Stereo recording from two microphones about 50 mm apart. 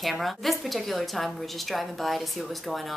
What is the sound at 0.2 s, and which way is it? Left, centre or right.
A woman's voice, centre.